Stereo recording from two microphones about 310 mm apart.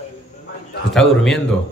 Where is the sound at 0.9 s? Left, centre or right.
Centre.